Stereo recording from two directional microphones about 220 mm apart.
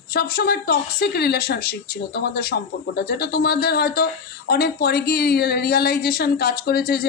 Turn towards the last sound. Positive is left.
turn(degrees=45)  # may be behind; listen again after turning